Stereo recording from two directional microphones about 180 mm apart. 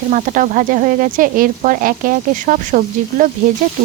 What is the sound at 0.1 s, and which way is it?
Frying, 45° right (ahead or behind).